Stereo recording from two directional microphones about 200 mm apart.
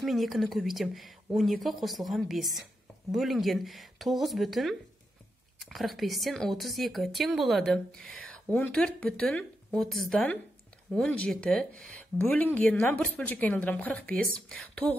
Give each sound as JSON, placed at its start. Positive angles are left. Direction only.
{"t": 0.0, "sound": "speech", "side_deg": 0}